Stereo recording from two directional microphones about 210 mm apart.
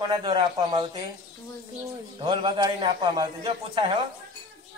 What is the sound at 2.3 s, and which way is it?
A man's voice, 20° right (ahead or behind).